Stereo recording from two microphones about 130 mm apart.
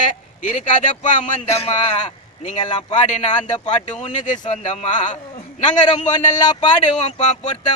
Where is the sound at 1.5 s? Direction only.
50° left (ahead or behind).